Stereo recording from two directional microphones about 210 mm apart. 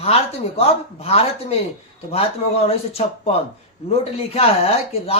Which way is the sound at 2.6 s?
30° left (ahead or behind).